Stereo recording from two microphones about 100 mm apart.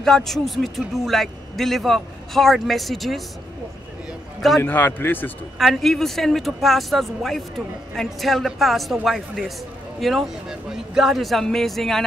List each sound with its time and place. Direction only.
0.0 s speech: 5° left (ahead or behind)
4.6 s a man's voice: 20° left (ahead or behind)
5.6 s speech: centre (ahead or behind)